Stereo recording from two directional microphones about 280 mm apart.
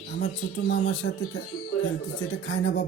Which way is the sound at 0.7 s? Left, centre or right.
Left.